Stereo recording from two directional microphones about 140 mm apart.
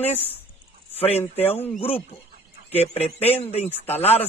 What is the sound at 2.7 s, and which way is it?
A man's voice, 45° left (ahead or behind).